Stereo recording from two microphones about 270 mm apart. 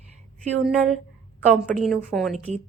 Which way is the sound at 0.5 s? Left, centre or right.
Centre.